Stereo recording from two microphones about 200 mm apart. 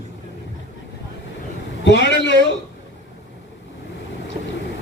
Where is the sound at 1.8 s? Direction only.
65° left (ahead or behind).